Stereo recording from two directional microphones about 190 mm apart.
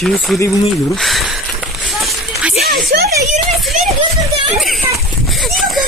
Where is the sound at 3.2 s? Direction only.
40° right (ahead or behind).